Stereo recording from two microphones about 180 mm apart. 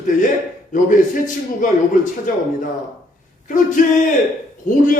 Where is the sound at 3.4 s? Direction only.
45° left (ahead or behind).